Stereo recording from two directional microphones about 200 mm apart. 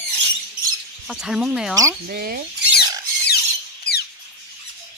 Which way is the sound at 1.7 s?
15° right (ahead or behind).